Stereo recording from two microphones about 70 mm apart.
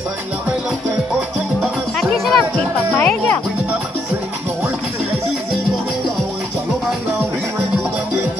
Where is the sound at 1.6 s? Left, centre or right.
Centre.